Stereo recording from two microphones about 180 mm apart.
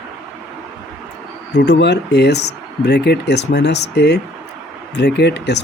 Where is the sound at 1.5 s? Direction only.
80° left.